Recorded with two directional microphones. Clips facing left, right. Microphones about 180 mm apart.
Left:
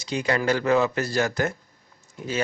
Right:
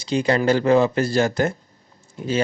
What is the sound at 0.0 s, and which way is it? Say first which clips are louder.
Speech: right 5 dB; 30° right (ahead or behind).